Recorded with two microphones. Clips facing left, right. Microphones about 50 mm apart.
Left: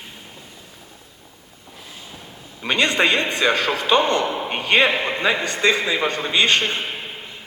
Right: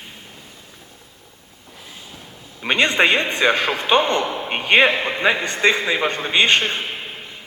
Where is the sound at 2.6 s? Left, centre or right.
Right.